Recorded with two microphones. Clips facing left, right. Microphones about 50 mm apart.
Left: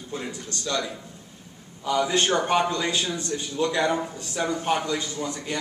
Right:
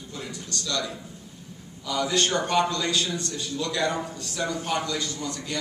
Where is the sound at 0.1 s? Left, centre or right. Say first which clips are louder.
Left 3 dB; left.